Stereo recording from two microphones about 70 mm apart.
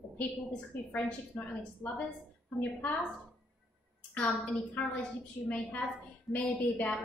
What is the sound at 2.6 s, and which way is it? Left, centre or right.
Speech, left.